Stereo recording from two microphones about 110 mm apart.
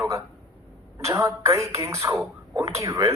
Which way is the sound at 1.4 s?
25° right (ahead or behind).